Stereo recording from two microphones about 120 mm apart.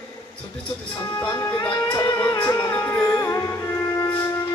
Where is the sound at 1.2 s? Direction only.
25° left (ahead or behind).